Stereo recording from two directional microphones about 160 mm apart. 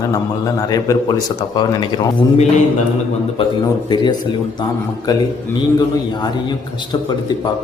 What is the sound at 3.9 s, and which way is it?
Speech, 25° left (ahead or behind).